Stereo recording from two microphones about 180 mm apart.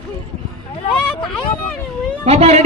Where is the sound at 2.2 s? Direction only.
35° right (ahead or behind).